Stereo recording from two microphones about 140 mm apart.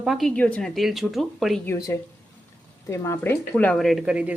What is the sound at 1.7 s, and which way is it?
Speech, 25° left (ahead or behind).